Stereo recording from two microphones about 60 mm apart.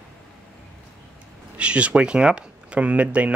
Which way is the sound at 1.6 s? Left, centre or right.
Centre.